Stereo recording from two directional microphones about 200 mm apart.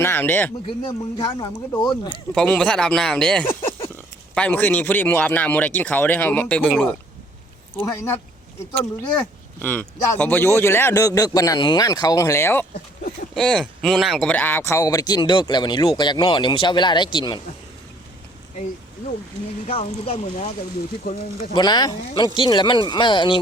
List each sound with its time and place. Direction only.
0.0 s speech: 10° left (ahead or behind)
0.8 s speech: 20° left (ahead or behind)
2.3 s speech: 5° left (ahead or behind)
8.7 s speech: 10° left (ahead or behind)
19.6 s speech: 30° left (ahead or behind)
21.0 s speech: 45° left (ahead or behind)
21.5 s speech: 20° left (ahead or behind)